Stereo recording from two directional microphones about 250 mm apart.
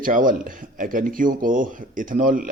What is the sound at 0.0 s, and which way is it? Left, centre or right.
Speech, right.